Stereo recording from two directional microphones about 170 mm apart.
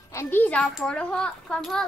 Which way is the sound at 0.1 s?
15° left (ahead or behind).